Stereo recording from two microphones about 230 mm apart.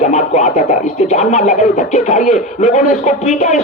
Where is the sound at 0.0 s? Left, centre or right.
Left.